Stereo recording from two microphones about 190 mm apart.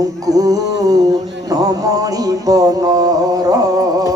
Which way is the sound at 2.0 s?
20° right (ahead or behind).